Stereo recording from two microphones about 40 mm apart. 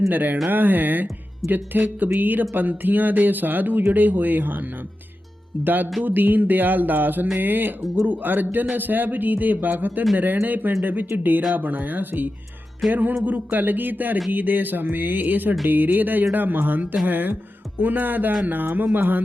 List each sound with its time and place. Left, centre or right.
0.1 s speech: right